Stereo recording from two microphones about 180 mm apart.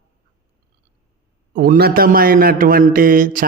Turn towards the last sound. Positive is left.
turn(degrees=-50)  # may be behind; listen again after turning